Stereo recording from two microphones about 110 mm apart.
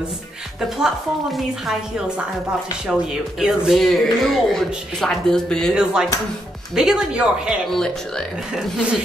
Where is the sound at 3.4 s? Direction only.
5° right (ahead or behind).